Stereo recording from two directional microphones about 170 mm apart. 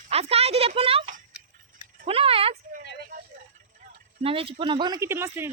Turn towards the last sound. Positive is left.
turn(degrees=-15)  # may be behind; listen again after turning